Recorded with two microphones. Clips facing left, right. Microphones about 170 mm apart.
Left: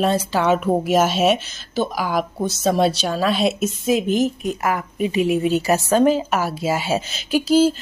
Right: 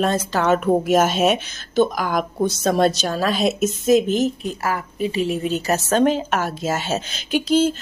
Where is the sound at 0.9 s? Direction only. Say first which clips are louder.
Left 1 dB; 50° right (ahead or behind).